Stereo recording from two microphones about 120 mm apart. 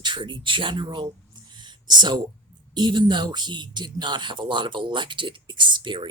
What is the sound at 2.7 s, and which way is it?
Speech, 40° right (ahead or behind).